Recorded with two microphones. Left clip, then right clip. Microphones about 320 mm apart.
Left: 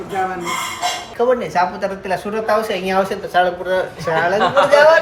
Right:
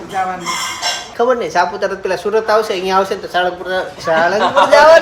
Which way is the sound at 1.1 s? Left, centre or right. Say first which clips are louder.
Right 3 dB; centre.